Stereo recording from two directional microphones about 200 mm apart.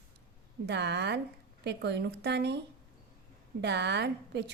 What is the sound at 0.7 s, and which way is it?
A woman's voice, 55° right (ahead or behind).